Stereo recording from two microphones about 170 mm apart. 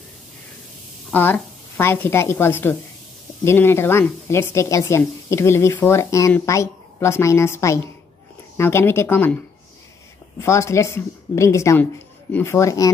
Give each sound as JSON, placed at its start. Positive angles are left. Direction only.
{"t": 1.1, "sound": "speech", "side_deg": 10}
{"t": 10.4, "sound": "speech", "side_deg": 15}